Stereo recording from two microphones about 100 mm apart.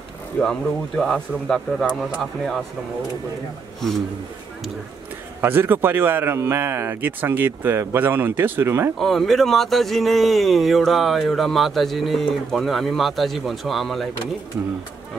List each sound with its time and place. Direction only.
0.4 s speech: 5° left (ahead or behind)
1.9 s speech: 10° right (ahead or behind)
5.4 s speech: 20° right (ahead or behind)
8.9 s speech: centre (ahead or behind)